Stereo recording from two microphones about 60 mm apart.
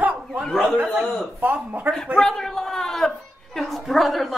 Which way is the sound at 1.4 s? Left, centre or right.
Right.